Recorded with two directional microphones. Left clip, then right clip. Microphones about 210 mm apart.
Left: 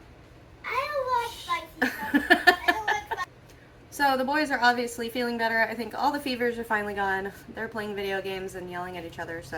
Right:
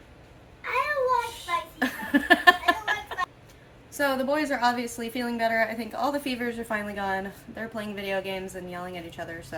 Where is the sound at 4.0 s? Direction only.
10° right (ahead or behind).